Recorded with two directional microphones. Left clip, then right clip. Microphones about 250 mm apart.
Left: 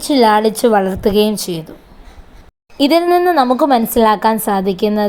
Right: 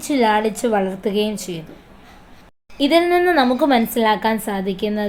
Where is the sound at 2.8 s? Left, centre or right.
Left.